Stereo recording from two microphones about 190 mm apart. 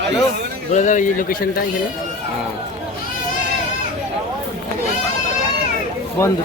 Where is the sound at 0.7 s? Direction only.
40° left (ahead or behind).